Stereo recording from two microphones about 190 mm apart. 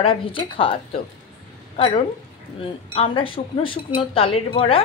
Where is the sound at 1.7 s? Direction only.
30° left (ahead or behind).